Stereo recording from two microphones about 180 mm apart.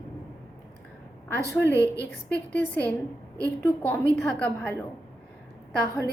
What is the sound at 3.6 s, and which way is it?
A woman's voice, 10° left (ahead or behind).